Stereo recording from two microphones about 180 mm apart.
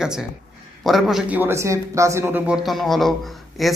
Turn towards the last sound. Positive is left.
turn(degrees=0)  # may be behind; listen again after turning